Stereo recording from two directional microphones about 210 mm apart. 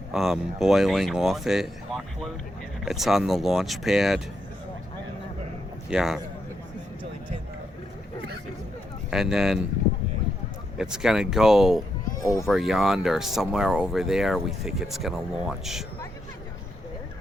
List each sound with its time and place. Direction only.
0.1 s speech: centre (ahead or behind)
5.9 s speech: centre (ahead or behind)
9.0 s speech: 5° right (ahead or behind)
10.8 s speech: 5° right (ahead or behind)
12.2 s speech: 15° left (ahead or behind)
12.5 s speech: centre (ahead or behind)